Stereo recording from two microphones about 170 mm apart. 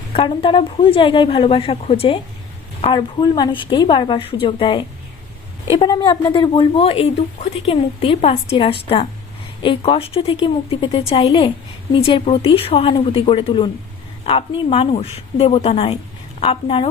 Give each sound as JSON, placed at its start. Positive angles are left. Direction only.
{"t": 0.1, "sound": "a woman's voice", "side_deg": 30}